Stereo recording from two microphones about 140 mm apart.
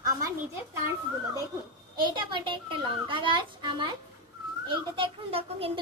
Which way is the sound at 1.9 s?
35° right (ahead or behind).